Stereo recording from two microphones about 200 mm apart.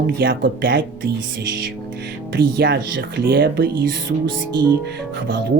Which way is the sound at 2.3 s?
60° right (ahead or behind).